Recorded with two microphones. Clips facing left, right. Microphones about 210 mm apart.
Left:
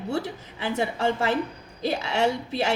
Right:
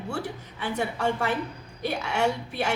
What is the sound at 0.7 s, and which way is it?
A woman's voice, 25° left (ahead or behind).